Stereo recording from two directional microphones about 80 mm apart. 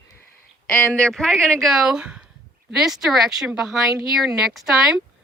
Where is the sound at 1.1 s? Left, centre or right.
Centre.